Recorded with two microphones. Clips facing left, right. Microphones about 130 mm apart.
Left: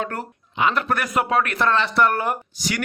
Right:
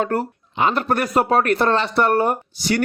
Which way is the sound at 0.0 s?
35° right (ahead or behind).